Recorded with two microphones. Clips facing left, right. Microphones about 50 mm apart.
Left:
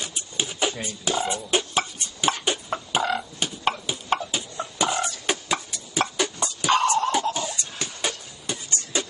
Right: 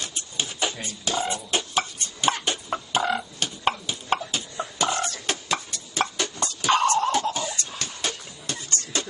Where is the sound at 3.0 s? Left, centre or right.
Centre.